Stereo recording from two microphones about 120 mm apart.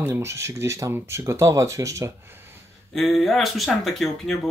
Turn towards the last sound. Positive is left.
turn(degrees=0)  # may be behind; listen again after turning